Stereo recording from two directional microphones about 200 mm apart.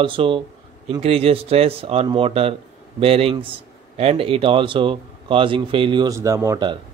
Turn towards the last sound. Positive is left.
turn(degrees=-20)  # may be behind; listen again after turning